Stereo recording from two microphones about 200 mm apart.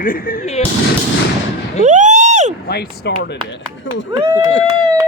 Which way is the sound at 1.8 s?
35° right (ahead or behind).